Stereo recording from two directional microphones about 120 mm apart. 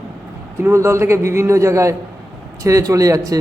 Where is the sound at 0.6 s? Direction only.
25° right (ahead or behind).